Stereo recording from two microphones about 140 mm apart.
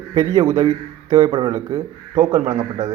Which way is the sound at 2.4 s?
50° right (ahead or behind).